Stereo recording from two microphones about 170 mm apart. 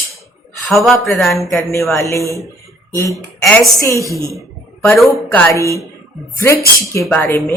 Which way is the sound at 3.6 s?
20° left (ahead or behind).